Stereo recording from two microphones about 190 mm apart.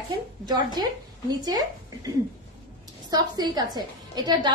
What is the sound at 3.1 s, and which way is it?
A woman's voice, 20° right (ahead or behind).